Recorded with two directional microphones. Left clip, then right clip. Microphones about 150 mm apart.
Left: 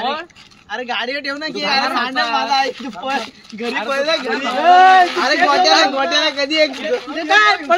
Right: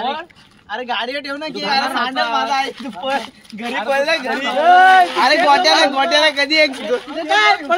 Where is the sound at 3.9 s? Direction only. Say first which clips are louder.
Right 2 dB; 90° right.